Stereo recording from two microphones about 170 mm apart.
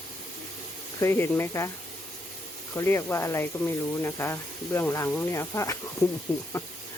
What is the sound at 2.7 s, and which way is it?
Speech, 15° left (ahead or behind).